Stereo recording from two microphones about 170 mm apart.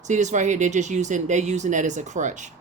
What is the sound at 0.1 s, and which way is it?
Speech, 45° right (ahead or behind).